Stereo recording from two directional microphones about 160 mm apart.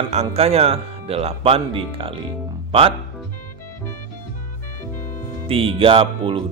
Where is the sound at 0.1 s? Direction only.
40° right (ahead or behind).